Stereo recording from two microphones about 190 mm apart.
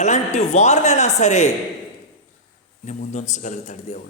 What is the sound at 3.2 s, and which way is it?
Speech, 40° left (ahead or behind).